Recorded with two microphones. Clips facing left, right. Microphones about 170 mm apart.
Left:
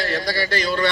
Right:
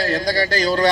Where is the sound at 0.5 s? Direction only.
40° right (ahead or behind).